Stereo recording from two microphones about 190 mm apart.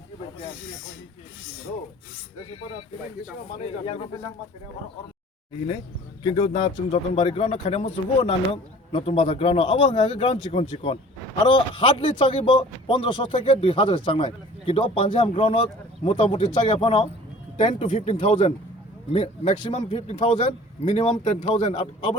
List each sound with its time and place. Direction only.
3.6 s a man's voice: 35° left (ahead or behind)
6.2 s a man's voice: 35° left (ahead or behind)